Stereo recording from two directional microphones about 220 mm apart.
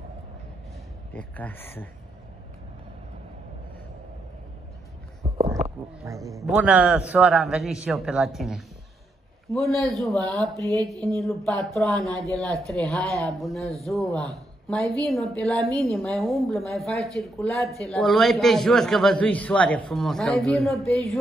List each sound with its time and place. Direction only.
1.1 s speech: 5° left (ahead or behind)
5.2 s a sound: 20° right (ahead or behind)
6.0 s a man's voice: 15° right (ahead or behind); by 21.2 s centre (ahead or behind)